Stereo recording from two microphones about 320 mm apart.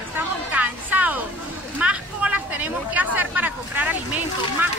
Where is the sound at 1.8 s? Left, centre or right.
Centre.